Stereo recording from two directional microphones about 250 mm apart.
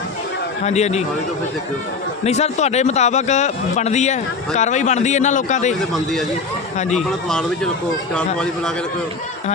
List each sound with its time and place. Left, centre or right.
0.6 s a man's voice: left
2.2 s a man's voice: left
5.9 s speech: centre